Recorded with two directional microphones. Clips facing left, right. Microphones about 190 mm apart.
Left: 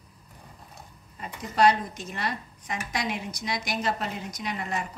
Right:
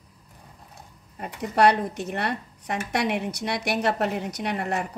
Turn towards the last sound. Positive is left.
turn(degrees=-65)  # may be behind; listen again after turning